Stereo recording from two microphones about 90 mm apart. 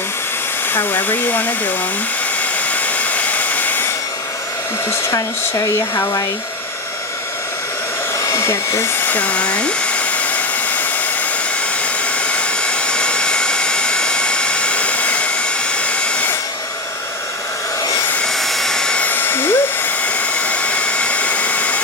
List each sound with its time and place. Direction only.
0.7 s hair dryer: 20° left (ahead or behind)
2.8 s hair dryer: 15° left (ahead or behind)
4.9 s hair dryer: 35° left (ahead or behind)
8.2 s hair dryer: 35° left (ahead or behind)
9.0 s hair dryer: 15° left (ahead or behind)
12.3 s hair dryer: 10° left (ahead or behind)
18.2 s hair dryer: 5° left (ahead or behind)